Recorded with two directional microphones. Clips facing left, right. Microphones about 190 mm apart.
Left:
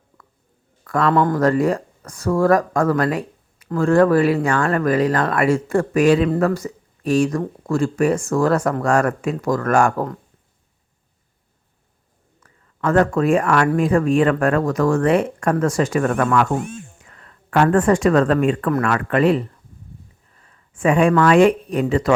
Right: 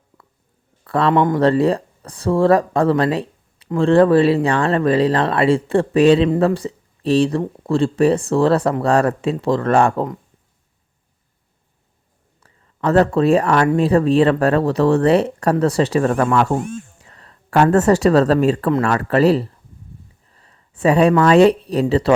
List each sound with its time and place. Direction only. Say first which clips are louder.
0.9 s a man's voice: right 2 dB; 30° right (ahead or behind)
1.1 s speech: right 1 dB; 20° right (ahead or behind)
1.4 s speech: right 2 dB; 30° right (ahead or behind)
12.4 s speech: right 2 dB; 35° right (ahead or behind)
20.3 s a sound: right 1 dB; 30° right (ahead or behind)
21.1 s speech: right 1 dB; 30° right (ahead or behind)